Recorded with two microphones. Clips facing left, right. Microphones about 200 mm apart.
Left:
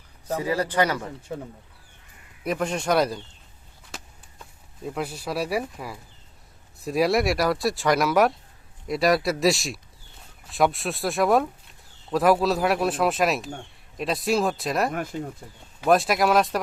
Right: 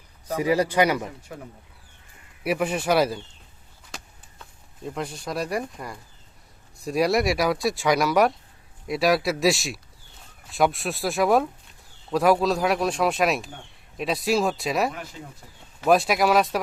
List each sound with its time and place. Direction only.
0.3 s speech: 15° right (ahead or behind)
2.4 s speech: 10° right (ahead or behind)
4.8 s speech: 5° left (ahead or behind)
15.1 s speech: 55° left (ahead or behind)
15.9 s speech: centre (ahead or behind)